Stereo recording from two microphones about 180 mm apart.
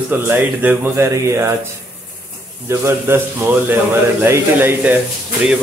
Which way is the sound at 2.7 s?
15° right (ahead or behind).